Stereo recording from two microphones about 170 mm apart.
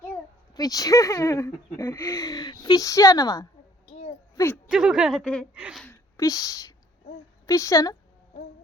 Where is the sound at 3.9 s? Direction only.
40° left (ahead or behind).